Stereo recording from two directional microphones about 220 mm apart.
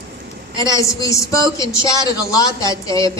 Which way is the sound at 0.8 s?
15° left (ahead or behind).